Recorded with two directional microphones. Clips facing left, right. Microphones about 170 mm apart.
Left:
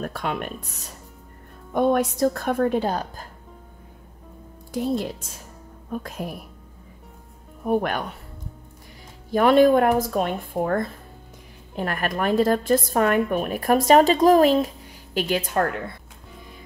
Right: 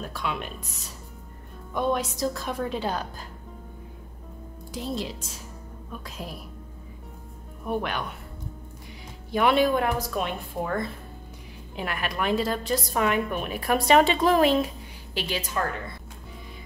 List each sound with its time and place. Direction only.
0.0 s a woman's voice: 50° left (ahead or behind)
4.9 s a woman's voice: 55° left (ahead or behind)
7.6 s a woman's voice: 45° left (ahead or behind)
9.3 s a woman's voice: 45° left (ahead or behind); by 15.8 s 60° left (ahead or behind)